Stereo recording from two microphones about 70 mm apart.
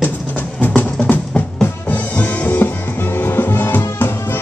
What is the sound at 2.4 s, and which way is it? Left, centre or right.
Music, left.